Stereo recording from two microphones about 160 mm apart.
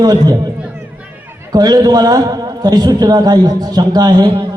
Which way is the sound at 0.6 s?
10° right (ahead or behind).